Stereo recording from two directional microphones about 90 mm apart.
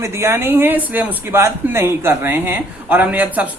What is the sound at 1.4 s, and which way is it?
A man's voice, 30° right (ahead or behind).